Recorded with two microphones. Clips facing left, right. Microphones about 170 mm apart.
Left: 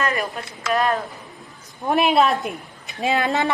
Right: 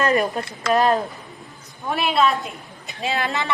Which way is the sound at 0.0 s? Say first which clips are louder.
Right 5 dB; 35° right (ahead or behind).